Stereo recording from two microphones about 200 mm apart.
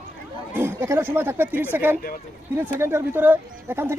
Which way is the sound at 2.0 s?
45° left (ahead or behind).